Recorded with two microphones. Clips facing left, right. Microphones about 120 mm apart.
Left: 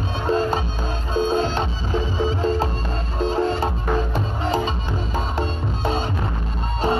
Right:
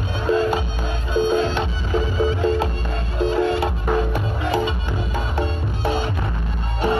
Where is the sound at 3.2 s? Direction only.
35° left (ahead or behind).